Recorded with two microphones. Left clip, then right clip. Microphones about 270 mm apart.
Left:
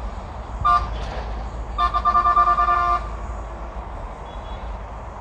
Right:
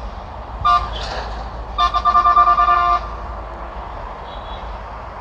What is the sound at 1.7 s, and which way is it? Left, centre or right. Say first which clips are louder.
Vehicle: right 4 dB; right.